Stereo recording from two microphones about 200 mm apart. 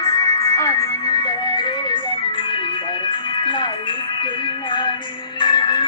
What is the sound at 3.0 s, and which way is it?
Music, 25° left (ahead or behind).